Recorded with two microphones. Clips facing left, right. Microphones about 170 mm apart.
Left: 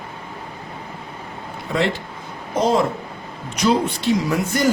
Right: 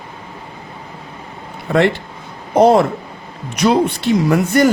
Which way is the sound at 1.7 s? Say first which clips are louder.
Right 7 dB; 55° right (ahead or behind).